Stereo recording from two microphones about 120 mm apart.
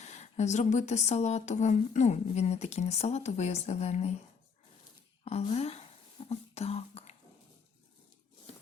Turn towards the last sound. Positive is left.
turn(degrees=60)  # may be behind; listen again after turning